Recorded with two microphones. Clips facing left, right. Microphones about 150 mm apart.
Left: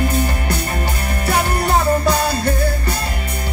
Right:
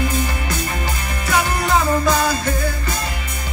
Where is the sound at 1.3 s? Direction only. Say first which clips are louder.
Left 1 dB; 35° left (ahead or behind).